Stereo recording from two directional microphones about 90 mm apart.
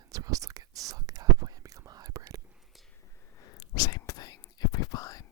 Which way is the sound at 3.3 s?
45° left (ahead or behind).